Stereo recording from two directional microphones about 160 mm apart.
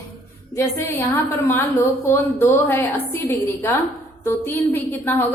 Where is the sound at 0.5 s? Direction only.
15° left (ahead or behind).